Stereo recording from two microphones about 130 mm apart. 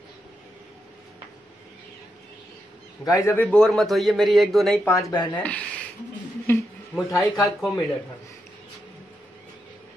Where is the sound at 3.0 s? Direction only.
20° left (ahead or behind).